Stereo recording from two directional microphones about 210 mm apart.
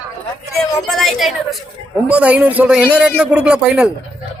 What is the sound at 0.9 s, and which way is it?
A man's voice, centre (ahead or behind).